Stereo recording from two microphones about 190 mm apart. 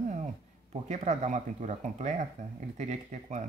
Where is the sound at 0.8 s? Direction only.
40° right (ahead or behind).